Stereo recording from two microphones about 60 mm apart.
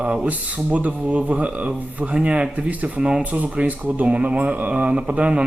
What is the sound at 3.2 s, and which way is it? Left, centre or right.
Speech, right.